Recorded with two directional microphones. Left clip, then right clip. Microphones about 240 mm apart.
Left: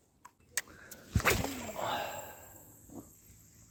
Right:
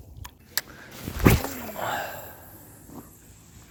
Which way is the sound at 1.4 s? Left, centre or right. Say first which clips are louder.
Right 6 dB; centre.